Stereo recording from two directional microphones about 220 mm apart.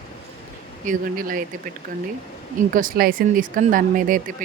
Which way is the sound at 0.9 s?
40° right (ahead or behind).